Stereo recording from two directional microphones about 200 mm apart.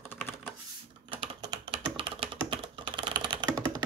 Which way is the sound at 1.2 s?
20° right (ahead or behind).